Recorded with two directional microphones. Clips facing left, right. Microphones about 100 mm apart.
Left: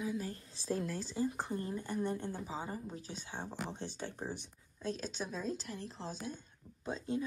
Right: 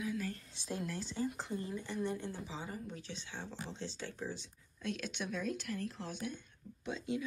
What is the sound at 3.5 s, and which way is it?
Speech, 55° left (ahead or behind).